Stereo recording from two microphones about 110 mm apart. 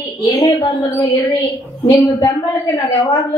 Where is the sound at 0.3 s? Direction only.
35° left (ahead or behind).